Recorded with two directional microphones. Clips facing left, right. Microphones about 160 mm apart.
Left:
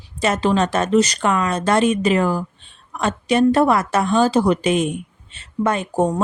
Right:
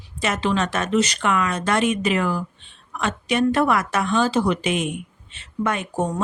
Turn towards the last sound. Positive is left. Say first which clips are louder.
# left 5 dB
turn(degrees=35)  # may be behind; listen again after turning